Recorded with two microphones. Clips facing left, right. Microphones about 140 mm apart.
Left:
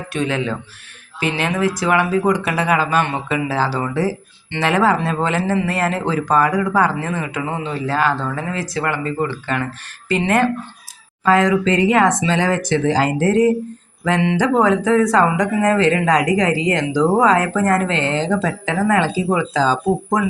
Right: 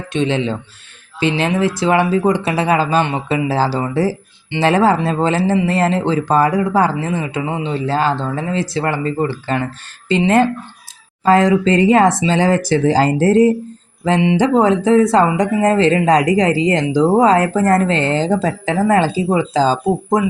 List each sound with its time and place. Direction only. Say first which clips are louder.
0.1 s speech: right 4 dB; 25° right (ahead or behind)